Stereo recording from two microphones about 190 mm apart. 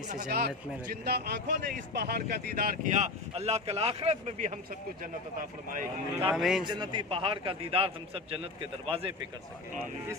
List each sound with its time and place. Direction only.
0.3 s speech: 55° right (ahead or behind)
6.3 s a man's voice: centre (ahead or behind)
6.7 s a man's voice: 25° right (ahead or behind)